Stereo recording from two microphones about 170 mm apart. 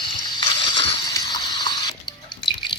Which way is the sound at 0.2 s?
25° left (ahead or behind).